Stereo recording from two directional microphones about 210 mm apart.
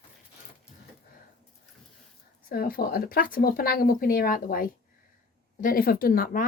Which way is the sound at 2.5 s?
45° left (ahead or behind).